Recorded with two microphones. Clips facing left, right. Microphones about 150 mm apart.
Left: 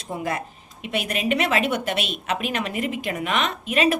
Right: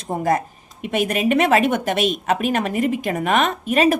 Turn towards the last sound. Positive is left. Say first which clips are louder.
# right 4 dB
turn(degrees=-45)  # may be behind; listen again after turning